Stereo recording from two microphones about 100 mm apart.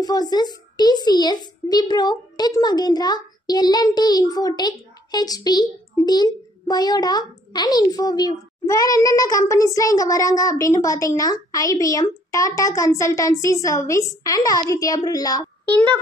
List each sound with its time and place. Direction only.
0.0 s a child's voice: 40° left (ahead or behind)